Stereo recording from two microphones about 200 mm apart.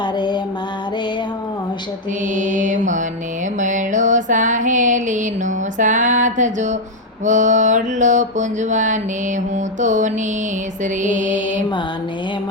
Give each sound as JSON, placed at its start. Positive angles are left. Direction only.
{"t": 0.0, "sound": "music", "side_deg": 20}
{"t": 2.3, "sound": "music", "side_deg": -40}